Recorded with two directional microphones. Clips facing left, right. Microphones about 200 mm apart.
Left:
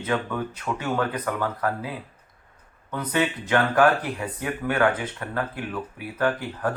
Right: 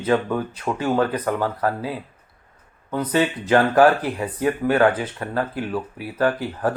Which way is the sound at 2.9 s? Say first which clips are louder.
Right 4 dB; 30° right (ahead or behind).